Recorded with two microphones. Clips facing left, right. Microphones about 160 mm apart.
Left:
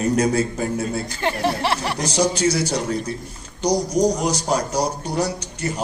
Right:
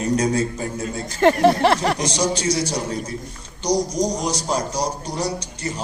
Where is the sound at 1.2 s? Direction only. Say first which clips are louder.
Right 8 dB; 50° right (ahead or behind).